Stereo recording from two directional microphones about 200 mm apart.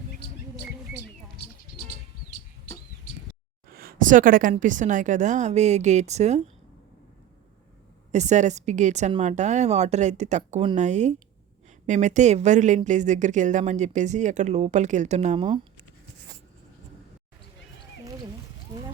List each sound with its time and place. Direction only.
3.7 s a sound: 50° right (ahead or behind)
4.5 s speech: 40° right (ahead or behind)
8.1 s speech: 35° right (ahead or behind)